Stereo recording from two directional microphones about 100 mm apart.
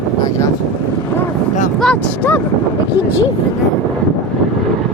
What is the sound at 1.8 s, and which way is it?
Speech, 10° left (ahead or behind).